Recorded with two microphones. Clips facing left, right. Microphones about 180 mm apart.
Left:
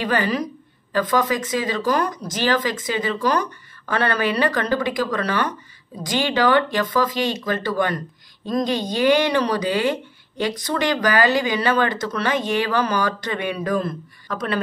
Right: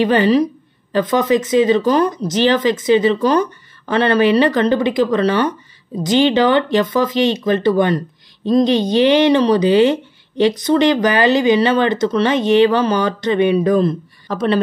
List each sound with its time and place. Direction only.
0.0 s speech: 25° right (ahead or behind)